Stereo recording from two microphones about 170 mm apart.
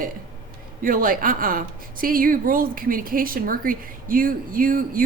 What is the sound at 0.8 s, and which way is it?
A woman's voice, 55° right (ahead or behind).